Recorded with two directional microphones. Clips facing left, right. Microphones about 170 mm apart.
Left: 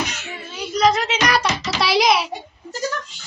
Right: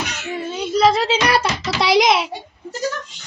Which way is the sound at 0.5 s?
30° right (ahead or behind).